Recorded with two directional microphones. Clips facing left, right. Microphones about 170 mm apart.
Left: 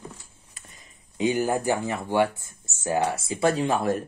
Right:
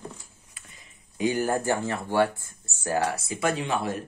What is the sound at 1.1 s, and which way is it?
Speech, 20° left (ahead or behind).